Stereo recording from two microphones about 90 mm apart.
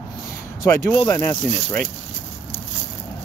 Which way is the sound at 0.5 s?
40° left (ahead or behind).